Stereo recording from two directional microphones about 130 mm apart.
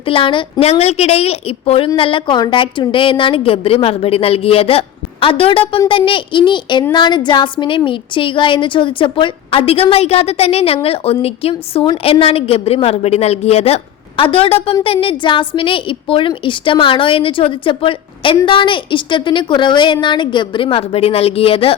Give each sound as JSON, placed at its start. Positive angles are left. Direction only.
{"t": 0.0, "sound": "a woman's voice", "side_deg": 45}